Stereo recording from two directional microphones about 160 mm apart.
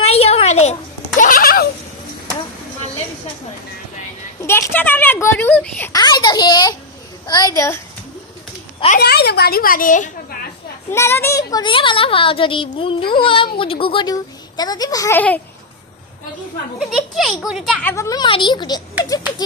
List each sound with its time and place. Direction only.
0.0 s a sound: 40° left (ahead or behind); by 1.6 s 70° left (ahead or behind)
4.4 s speech: 15° left (ahead or behind)
5.9 s a sound: 25° left (ahead or behind)
7.3 s speech: 25° left (ahead or behind)
9.0 s a child's voice: 80° left; by 10.3 s 55° left (ahead or behind)
10.9 s a child's voice: 15° left (ahead or behind)
16.7 s speech: centre (ahead or behind)
17.8 s speech: 20° left (ahead or behind)